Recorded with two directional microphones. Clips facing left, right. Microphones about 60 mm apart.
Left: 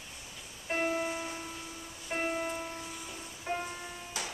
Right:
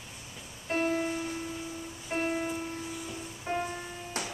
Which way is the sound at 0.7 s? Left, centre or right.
Centre.